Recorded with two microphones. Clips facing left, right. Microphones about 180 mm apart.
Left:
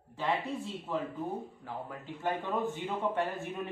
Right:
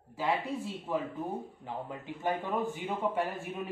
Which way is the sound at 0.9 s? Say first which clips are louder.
Right 1 dB; 15° right (ahead or behind).